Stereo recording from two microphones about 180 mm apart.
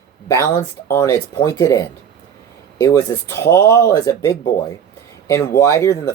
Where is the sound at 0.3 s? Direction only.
20° left (ahead or behind).